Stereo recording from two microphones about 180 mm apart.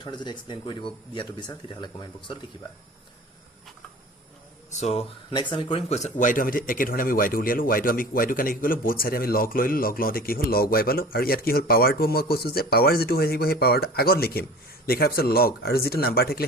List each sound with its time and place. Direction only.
0.0 s speech: 25° left (ahead or behind)
4.7 s speech: 40° left (ahead or behind)
5.3 s speech: 25° left (ahead or behind); by 16.5 s 60° left (ahead or behind)